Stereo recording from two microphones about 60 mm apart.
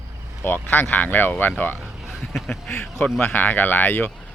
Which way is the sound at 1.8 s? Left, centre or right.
Centre.